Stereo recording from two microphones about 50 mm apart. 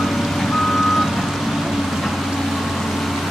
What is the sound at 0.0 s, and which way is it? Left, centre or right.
Reversing beeps, centre.